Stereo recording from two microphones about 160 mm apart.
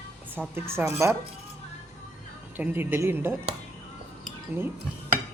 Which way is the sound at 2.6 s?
15° right (ahead or behind).